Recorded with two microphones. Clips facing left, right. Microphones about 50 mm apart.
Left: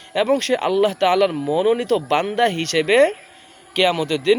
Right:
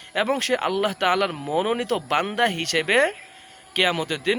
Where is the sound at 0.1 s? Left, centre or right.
Centre.